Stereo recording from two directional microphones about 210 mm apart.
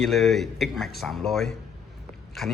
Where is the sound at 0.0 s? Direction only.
Centre (ahead or behind).